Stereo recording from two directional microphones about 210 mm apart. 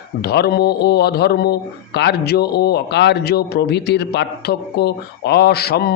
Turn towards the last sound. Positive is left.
turn(degrees=50)  # may be behind; listen again after turning